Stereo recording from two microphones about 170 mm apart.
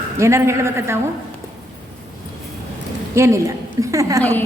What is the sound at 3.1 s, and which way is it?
A woman's voice, 15° right (ahead or behind).